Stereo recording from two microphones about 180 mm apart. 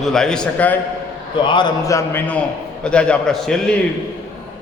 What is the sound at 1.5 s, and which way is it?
A man's voice, 25° left (ahead or behind).